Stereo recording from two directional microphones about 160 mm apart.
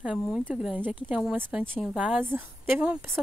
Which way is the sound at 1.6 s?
5° left (ahead or behind).